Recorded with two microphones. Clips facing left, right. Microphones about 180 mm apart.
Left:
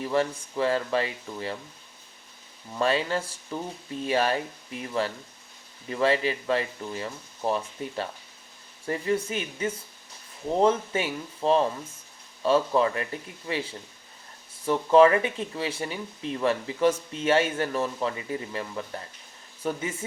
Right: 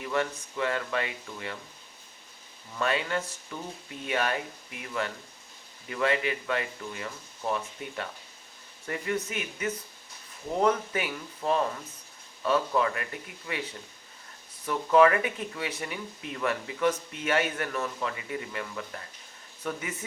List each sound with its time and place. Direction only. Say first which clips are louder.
0.0 s speech: left 4 dB; 30° left (ahead or behind)
2.7 s speech: left 4 dB; 30° left (ahead or behind)